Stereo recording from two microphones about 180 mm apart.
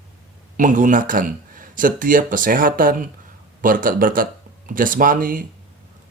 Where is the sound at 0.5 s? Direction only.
45° right (ahead or behind).